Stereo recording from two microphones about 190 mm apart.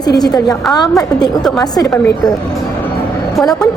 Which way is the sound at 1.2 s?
Centre (ahead or behind).